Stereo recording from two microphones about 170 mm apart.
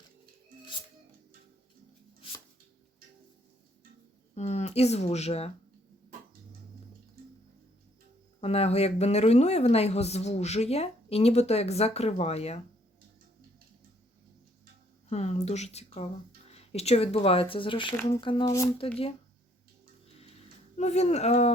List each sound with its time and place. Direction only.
4.4 s speech: 40° left (ahead or behind)
8.4 s speech: 35° left (ahead or behind)
15.1 s speech: 40° left (ahead or behind); by 18.7 s 20° left (ahead or behind)
20.7 s speech: 40° left (ahead or behind)